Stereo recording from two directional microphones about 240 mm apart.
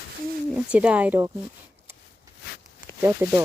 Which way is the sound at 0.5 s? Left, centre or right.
Centre.